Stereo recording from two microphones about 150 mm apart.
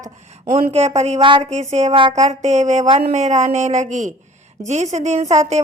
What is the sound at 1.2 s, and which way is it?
Speech, 35° right (ahead or behind).